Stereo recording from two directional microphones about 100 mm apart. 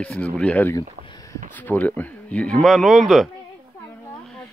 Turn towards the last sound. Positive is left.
turn(degrees=0)  # may be behind; listen again after turning